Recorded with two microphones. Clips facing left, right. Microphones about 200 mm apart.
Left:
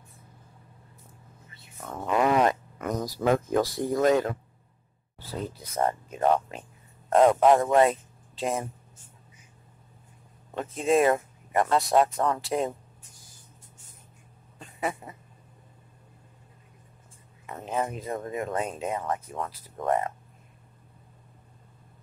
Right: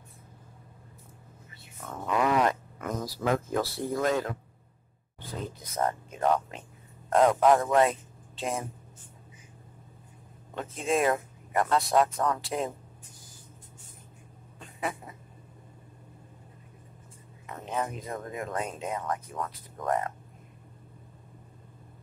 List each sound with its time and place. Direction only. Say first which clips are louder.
2.0 s speech: left 3 dB; 25° left (ahead or behind)
5.8 s speech: left 3 dB; 25° left (ahead or behind)
7.8 s speech: left 3 dB; centre (ahead or behind)
10.5 s speech: left 5 dB; centre (ahead or behind)
11.5 s speech: left 2 dB; 25° left (ahead or behind)
12.4 s speech: left 4 dB; centre (ahead or behind)
14.6 s a sound: left 3 dB; centre (ahead or behind)
17.6 s speech: left 3 dB; 30° left (ahead or behind)